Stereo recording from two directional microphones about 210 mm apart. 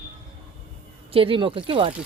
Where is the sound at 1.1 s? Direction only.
25° right (ahead or behind).